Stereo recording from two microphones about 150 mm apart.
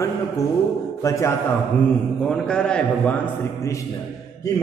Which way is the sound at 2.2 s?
5° left (ahead or behind).